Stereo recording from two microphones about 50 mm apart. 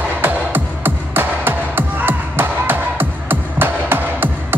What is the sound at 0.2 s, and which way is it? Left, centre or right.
Music, right.